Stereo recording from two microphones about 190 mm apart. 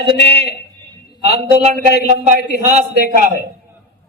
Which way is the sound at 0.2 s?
60° left (ahead or behind).